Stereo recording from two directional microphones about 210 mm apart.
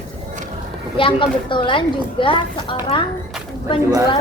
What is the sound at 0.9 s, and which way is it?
Speech, 25° left (ahead or behind).